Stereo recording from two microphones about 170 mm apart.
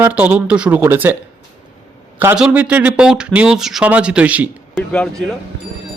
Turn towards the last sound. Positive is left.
turn(degrees=5)  # may be behind; listen again after turning